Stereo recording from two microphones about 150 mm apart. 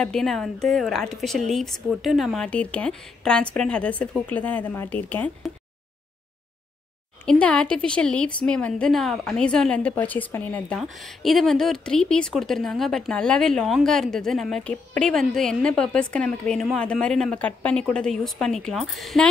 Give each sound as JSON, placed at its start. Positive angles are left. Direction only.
{"t": 0.0, "sound": "speech", "side_deg": 5}
{"t": 7.2, "sound": "a woman's voice", "side_deg": 5}
{"t": 10.8, "sound": "speech", "side_deg": 0}